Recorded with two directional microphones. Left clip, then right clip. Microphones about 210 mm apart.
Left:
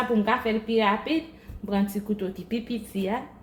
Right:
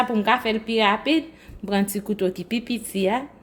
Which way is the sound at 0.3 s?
60° right (ahead or behind).